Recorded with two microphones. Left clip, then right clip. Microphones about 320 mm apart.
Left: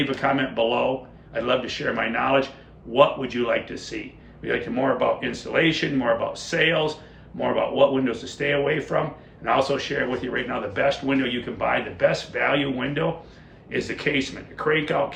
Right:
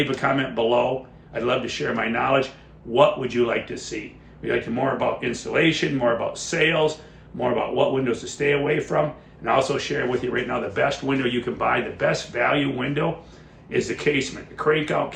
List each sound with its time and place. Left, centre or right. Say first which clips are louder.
0.0 s speech: right 1 dB; centre